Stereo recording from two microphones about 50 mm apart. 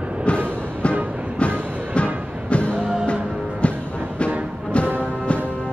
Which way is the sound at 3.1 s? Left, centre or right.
Left.